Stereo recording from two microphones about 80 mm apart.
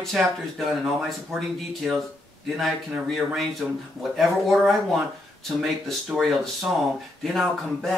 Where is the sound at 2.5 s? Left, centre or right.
Centre.